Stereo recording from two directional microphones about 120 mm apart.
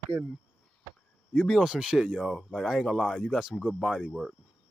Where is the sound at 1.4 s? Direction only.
Centre (ahead or behind).